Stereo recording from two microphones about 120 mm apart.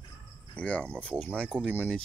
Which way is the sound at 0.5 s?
10° left (ahead or behind).